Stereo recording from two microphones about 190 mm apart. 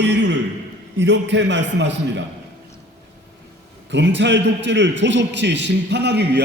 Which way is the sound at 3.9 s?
65° right (ahead or behind).